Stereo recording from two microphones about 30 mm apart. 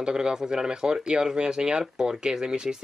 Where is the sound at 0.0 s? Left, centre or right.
Right.